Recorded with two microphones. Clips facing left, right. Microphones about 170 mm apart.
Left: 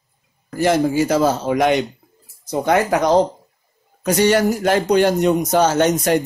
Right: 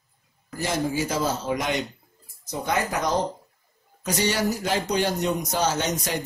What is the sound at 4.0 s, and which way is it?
A man's voice, 55° left (ahead or behind).